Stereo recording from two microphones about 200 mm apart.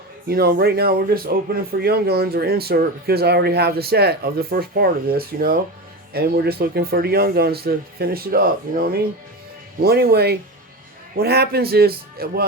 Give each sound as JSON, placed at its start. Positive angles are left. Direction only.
{"t": 0.3, "sound": "speech", "side_deg": -50}